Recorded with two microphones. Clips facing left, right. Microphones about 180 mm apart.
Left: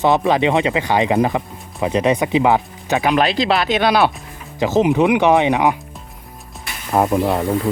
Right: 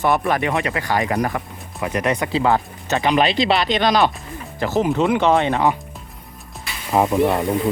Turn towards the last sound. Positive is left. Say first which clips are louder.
# even
turn(degrees=0)  # may be behind; listen again after turning